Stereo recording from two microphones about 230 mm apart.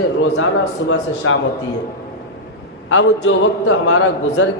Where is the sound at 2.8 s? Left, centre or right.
Left.